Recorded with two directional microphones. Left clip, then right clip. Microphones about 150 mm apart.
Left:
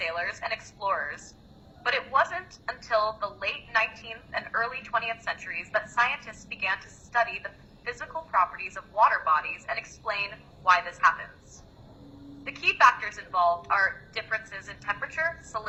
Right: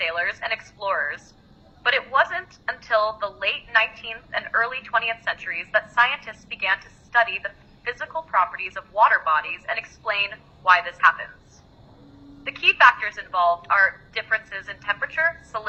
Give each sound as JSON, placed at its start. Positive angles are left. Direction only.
{"t": 0.0, "sound": "a woman's voice", "side_deg": -15}
{"t": 12.4, "sound": "a woman's voice", "side_deg": -20}